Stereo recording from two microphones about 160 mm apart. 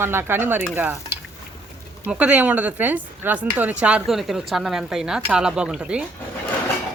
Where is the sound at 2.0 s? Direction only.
10° right (ahead or behind).